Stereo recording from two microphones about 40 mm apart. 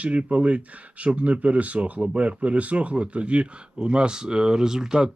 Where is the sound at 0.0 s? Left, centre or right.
Right.